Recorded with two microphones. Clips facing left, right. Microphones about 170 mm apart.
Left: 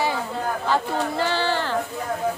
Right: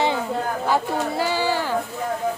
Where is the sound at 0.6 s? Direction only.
10° right (ahead or behind).